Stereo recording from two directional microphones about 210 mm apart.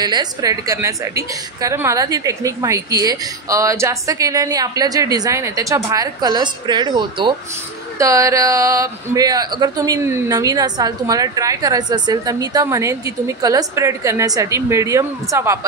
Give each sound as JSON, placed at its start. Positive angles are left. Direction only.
{"t": 0.0, "sound": "speech", "side_deg": -20}